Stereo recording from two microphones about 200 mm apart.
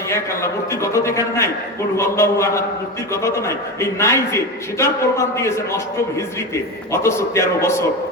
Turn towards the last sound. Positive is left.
turn(degrees=15)  # may be behind; listen again after turning